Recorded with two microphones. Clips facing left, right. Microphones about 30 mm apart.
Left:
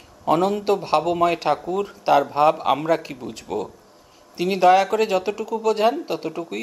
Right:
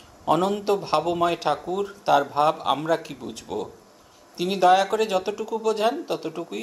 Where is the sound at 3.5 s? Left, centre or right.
Centre.